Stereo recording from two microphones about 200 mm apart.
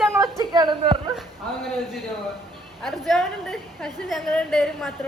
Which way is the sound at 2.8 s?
Centre (ahead or behind).